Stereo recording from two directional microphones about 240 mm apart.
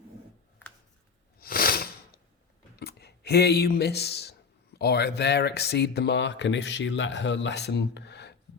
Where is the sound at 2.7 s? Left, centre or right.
Left.